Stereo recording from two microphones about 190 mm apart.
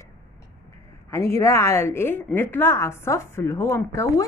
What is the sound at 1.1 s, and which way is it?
A woman's voice, 15° left (ahead or behind).